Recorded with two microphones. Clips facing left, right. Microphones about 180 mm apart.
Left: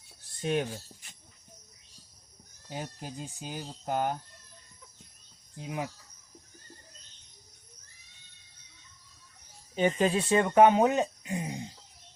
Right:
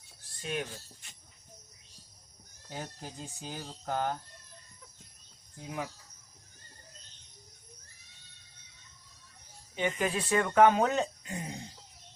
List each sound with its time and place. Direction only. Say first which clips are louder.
0.4 s speech: left 7 dB; 30° left (ahead or behind)
2.6 s speech: left 3 dB; 15° left (ahead or behind)
5.5 s speech: left 3 dB; 20° left (ahead or behind)
9.7 s speech: left 5 dB; 30° left (ahead or behind)